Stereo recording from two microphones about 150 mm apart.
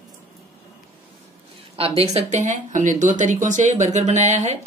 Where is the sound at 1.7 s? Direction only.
40° right (ahead or behind).